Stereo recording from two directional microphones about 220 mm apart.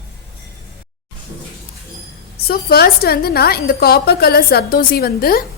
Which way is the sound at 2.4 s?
45° left (ahead or behind).